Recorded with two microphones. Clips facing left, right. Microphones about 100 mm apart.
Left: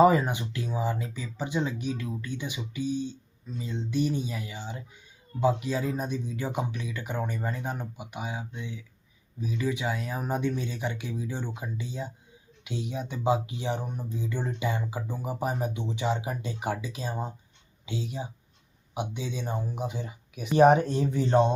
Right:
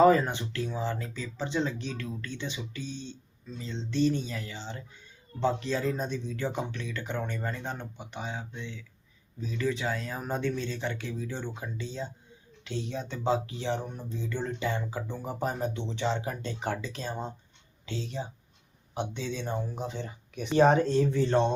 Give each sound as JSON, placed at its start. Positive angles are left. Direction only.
{"t": 0.0, "sound": "speech", "side_deg": 15}
{"t": 20.6, "sound": "speech", "side_deg": 15}